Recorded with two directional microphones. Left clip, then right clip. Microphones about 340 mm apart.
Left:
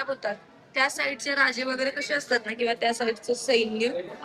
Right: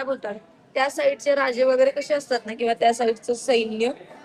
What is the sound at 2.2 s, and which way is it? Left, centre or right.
A man's voice, right.